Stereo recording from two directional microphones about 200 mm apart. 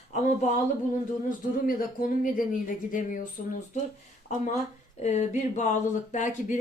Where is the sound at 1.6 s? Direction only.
45° left (ahead or behind).